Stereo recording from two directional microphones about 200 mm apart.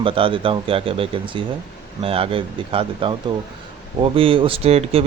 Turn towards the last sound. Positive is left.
turn(degrees=-30)  # may be behind; listen again after turning